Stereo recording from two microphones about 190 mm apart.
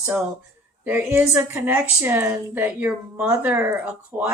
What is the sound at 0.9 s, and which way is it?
A woman's voice, 10° right (ahead or behind).